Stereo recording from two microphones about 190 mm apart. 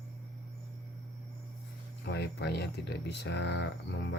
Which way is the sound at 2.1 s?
60° left (ahead or behind).